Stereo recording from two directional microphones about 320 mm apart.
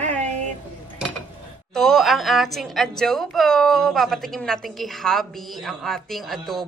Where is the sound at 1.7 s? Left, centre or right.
Centre.